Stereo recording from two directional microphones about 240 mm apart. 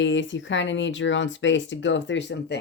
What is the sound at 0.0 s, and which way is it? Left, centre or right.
A woman's voice, left.